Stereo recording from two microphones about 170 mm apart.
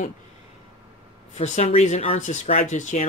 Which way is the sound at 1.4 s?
40° left (ahead or behind).